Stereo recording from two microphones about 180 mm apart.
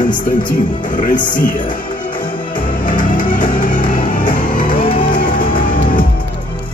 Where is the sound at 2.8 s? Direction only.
50° left (ahead or behind).